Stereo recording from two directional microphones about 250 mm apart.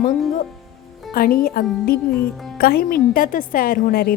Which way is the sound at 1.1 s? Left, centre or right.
Left.